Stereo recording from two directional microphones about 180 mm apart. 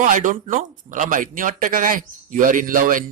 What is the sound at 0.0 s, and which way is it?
A man's voice, 45° right (ahead or behind).